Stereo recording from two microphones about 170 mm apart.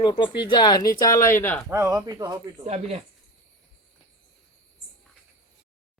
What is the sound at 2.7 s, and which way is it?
Speech, 40° right (ahead or behind).